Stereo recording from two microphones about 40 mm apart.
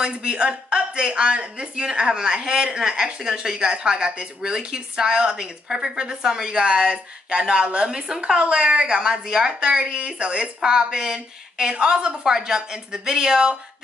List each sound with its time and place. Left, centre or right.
0.0 s a woman's voice: right